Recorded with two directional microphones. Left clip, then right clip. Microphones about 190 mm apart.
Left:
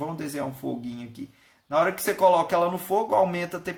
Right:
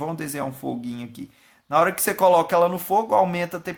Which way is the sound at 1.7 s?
30° right (ahead or behind).